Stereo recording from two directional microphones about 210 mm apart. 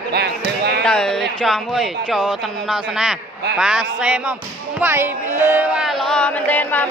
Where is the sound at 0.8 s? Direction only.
5° left (ahead or behind).